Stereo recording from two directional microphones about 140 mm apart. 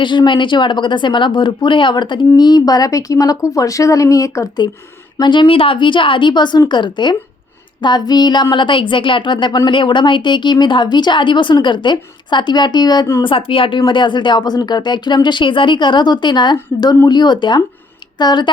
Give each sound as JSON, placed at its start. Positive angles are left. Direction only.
{"t": 0.0, "sound": "speech", "side_deg": 35}